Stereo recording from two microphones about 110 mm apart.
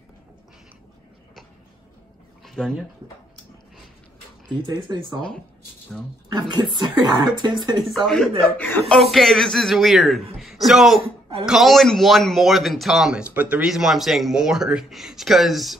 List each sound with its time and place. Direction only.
2.4 s speech: centre (ahead or behind)
4.5 s speech: 45° right (ahead or behind)
6.5 s speech: 45° right (ahead or behind)
7.9 s speech: 5° left (ahead or behind)
8.5 s speech: 20° left (ahead or behind)
8.8 s speech: centre (ahead or behind)
13.2 s speech: 15° right (ahead or behind)
13.7 s speech: 5° right (ahead or behind)